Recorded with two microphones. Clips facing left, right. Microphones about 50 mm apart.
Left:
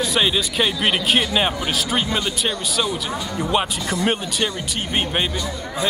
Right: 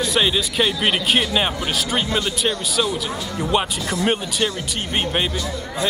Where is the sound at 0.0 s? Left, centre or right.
Centre.